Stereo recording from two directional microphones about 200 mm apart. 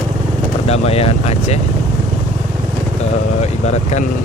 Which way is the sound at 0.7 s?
30° left (ahead or behind).